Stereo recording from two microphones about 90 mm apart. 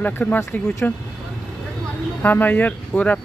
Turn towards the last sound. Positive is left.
turn(degrees=15)  # may be behind; listen again after turning